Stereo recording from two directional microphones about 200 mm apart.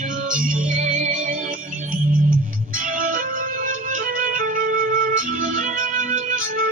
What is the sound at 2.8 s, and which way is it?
Music, 40° right (ahead or behind).